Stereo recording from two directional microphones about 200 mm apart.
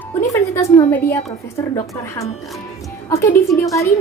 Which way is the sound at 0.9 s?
10° left (ahead or behind).